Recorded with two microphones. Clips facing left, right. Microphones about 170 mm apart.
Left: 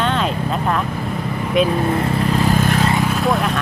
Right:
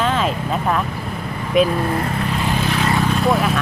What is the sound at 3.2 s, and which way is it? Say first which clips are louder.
Vehicle: right 1 dB; centre (ahead or behind).